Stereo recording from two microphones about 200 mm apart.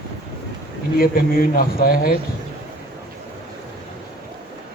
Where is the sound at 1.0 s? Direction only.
45° left (ahead or behind).